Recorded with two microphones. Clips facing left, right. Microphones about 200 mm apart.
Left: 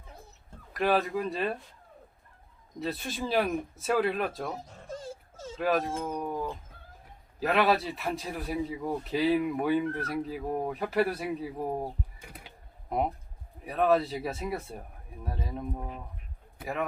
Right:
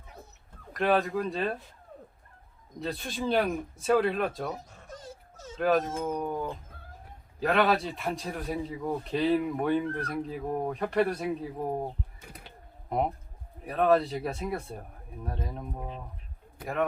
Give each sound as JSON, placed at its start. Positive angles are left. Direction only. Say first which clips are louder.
{"t": 0.7, "sound": "a man's voice", "louder": "right 1 dB", "side_deg": 0}
{"t": 2.8, "sound": "a man's voice", "louder": "right 1 dB", "side_deg": 0}
{"t": 4.5, "sound": "dog", "louder": "left 4 dB", "side_deg": 25}
{"t": 5.5, "sound": "a man's voice", "louder": "right 2 dB", "side_deg": 0}
{"t": 7.3, "sound": "a man's voice", "louder": "even", "side_deg": 5}
{"t": 13.7, "sound": "a man's voice", "louder": "right 1 dB", "side_deg": 0}